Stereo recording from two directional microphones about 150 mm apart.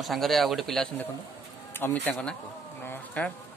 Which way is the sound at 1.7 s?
15° left (ahead or behind).